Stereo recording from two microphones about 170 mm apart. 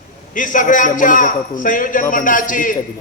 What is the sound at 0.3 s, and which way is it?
A man's voice, 50° left (ahead or behind).